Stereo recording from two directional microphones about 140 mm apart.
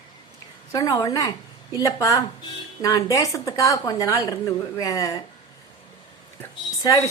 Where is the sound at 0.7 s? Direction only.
25° left (ahead or behind).